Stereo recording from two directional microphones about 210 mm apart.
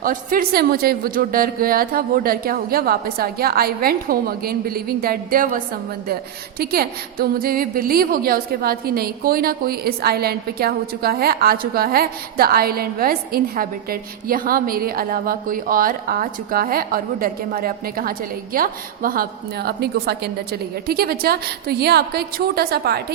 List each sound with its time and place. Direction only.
0.0 s a woman's voice: 40° right (ahead or behind)